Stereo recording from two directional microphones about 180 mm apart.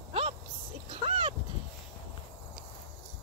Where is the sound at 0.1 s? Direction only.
35° right (ahead or behind).